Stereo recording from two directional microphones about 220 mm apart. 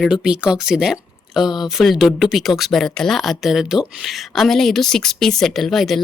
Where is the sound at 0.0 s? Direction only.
5° right (ahead or behind).